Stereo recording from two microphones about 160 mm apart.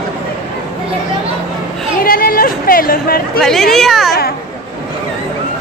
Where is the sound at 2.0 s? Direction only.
65° left (ahead or behind).